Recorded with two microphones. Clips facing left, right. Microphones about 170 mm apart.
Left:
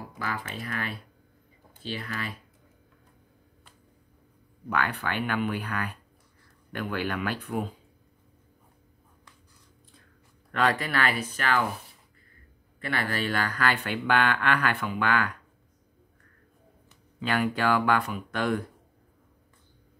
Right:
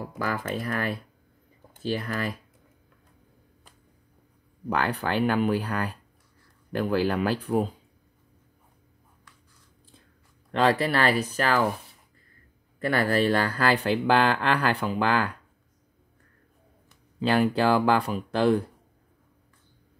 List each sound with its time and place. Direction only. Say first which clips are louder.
0.2 s speech: right 5 dB; 45° right (ahead or behind)
4.6 s speech: right 3 dB; 35° right (ahead or behind)
10.5 s speech: right 4 dB; 30° right (ahead or behind)
12.8 s speech: right 7 dB; 40° right (ahead or behind)
17.2 s speech: right 5 dB; 30° right (ahead or behind)